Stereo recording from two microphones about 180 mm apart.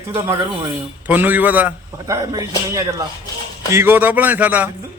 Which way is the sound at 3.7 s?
15° right (ahead or behind).